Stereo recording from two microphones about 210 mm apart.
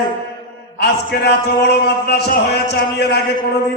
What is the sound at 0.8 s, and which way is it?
A man's voice, 50° left (ahead or behind).